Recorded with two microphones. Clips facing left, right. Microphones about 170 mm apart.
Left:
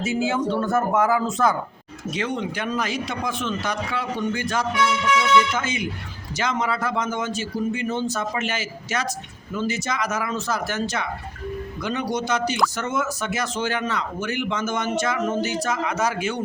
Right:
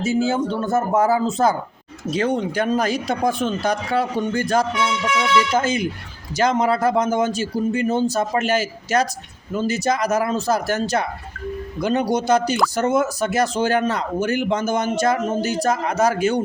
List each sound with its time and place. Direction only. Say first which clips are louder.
0.0 s speech: right 3 dB; 30° right (ahead or behind)